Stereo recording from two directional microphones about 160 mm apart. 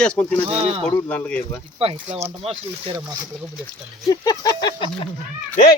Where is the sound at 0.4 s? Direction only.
35° right (ahead or behind).